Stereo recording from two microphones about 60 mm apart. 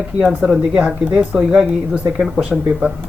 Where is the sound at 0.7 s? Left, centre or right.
Centre.